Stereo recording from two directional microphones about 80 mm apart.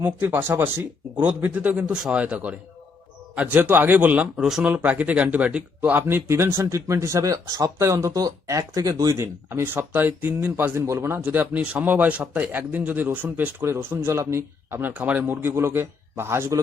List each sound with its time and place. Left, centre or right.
0.0 s a man's voice: right